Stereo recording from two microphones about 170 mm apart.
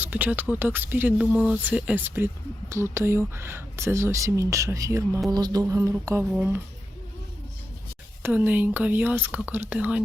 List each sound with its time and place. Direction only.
0.0 s speech: 10° right (ahead or behind)
5.3 s music: 25° right (ahead or behind)
6.3 s speech: 10° right (ahead or behind)
8.2 s speech: 10° right (ahead or behind)